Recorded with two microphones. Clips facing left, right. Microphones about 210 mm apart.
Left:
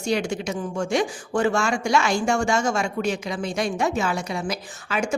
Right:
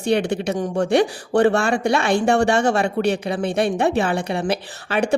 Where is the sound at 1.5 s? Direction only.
60° right (ahead or behind).